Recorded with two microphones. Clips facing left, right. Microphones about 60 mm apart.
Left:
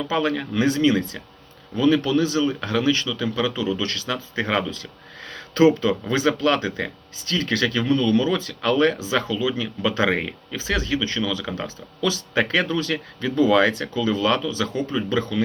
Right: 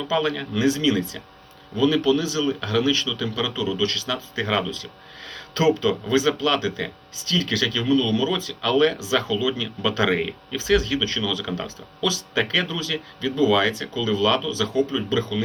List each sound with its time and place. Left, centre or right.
0.1 s speech: left